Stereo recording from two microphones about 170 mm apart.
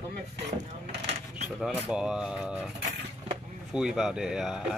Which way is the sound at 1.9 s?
5° right (ahead or behind).